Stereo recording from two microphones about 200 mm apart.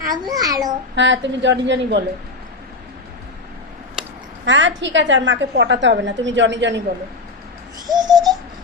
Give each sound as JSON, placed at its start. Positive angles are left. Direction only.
{"t": 0.1, "sound": "a child's voice", "side_deg": -20}
{"t": 0.9, "sound": "a woman's voice", "side_deg": -65}
{"t": 4.0, "sound": "a sound", "side_deg": -5}
{"t": 4.4, "sound": "a woman's voice", "side_deg": -65}
{"t": 8.1, "sound": "baby laughter", "side_deg": -20}